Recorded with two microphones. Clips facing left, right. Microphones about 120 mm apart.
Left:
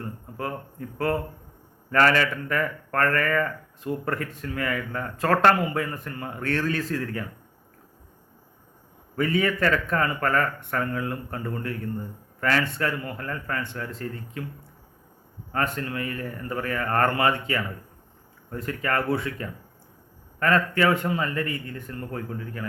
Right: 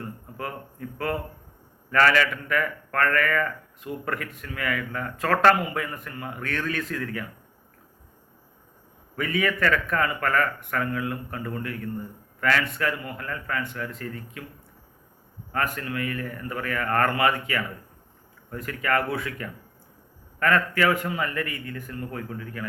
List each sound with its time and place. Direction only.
0.3 s speech: 30° left (ahead or behind)
9.1 s speech: 30° left (ahead or behind)
15.5 s speech: 30° left (ahead or behind)